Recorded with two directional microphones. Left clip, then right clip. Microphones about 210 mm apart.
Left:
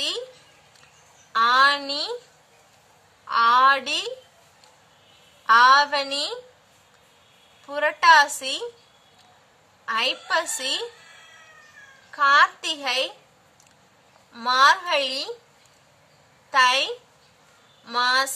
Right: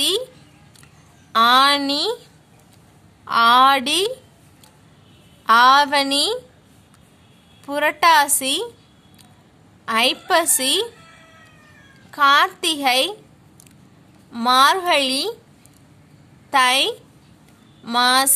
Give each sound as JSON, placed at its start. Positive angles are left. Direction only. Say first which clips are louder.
{"t": 1.3, "sound": "a woman's voice", "louder": "right 4 dB", "side_deg": -50}
{"t": 3.3, "sound": "a woman's voice", "louder": "right 4 dB", "side_deg": -50}
{"t": 5.4, "sound": "a woman's voice", "louder": "right 2 dB", "side_deg": -50}
{"t": 7.6, "sound": "a woman's voice", "louder": "right 2 dB", "side_deg": -50}
{"t": 9.8, "sound": "a woman's voice", "louder": "right 6 dB", "side_deg": -50}
{"t": 12.1, "sound": "a woman's voice", "louder": "right 2 dB", "side_deg": -50}
{"t": 14.3, "sound": "a woman's voice", "louder": "right 3 dB", "side_deg": -45}
{"t": 16.4, "sound": "a woman's voice", "louder": "right 3 dB", "side_deg": -50}